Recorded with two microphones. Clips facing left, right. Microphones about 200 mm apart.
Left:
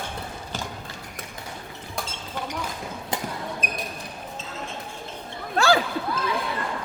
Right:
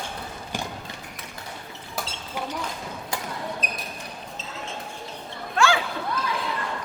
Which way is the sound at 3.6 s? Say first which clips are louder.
Left 1 dB; 50° left (ahead or behind).